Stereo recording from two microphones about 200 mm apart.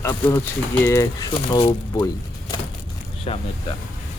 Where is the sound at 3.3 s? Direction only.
30° left (ahead or behind).